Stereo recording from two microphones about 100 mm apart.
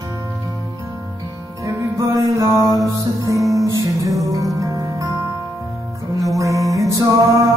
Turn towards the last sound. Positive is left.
turn(degrees=-30)  # may be behind; listen again after turning